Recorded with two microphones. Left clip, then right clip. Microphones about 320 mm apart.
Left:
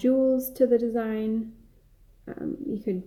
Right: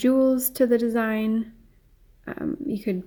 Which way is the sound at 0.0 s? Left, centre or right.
Right.